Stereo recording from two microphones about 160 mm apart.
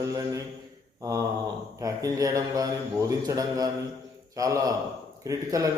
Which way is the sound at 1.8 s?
20° right (ahead or behind).